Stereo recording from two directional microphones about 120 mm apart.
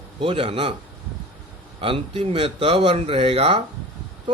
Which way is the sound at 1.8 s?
50° right (ahead or behind).